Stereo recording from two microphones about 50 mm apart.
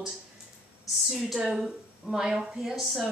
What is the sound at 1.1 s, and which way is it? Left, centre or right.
A woman's voice, centre.